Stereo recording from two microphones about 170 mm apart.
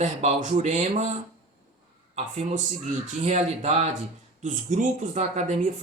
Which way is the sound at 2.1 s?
40° right (ahead or behind).